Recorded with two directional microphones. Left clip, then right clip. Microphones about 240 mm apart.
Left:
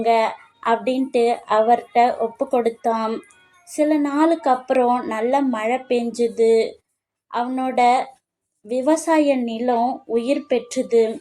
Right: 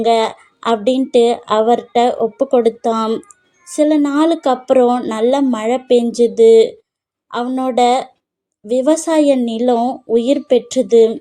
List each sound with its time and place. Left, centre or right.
0.1 s a woman's voice: right